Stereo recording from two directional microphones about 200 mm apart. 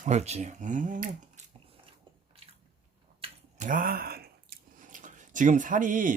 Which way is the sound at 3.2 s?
40° right (ahead or behind).